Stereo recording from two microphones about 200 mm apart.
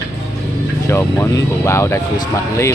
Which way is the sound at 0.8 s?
15° left (ahead or behind).